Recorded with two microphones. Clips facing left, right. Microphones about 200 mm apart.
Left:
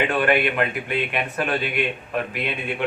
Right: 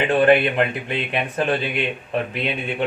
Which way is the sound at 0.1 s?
30° right (ahead or behind).